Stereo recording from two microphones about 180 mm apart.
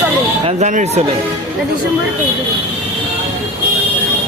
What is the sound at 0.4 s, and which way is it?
Speech, 40° right (ahead or behind).